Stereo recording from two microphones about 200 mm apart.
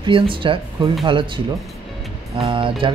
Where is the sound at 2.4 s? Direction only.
25° right (ahead or behind).